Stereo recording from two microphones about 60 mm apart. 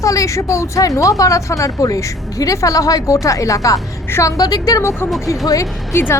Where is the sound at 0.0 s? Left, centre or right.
Left.